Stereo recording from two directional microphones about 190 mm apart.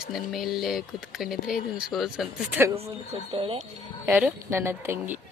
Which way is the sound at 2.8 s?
30° right (ahead or behind).